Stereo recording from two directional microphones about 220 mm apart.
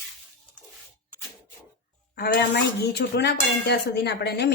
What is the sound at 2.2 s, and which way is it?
Speech, 50° left (ahead or behind).